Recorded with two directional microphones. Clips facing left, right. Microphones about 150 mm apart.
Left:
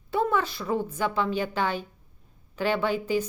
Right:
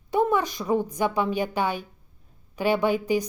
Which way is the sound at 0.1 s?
15° right (ahead or behind).